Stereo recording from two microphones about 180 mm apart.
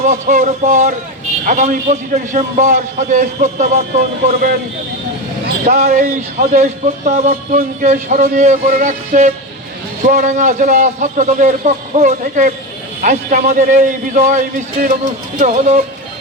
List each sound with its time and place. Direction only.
0.0 s a man's voice: 40° right (ahead or behind)
5.7 s a man's voice: 45° right (ahead or behind)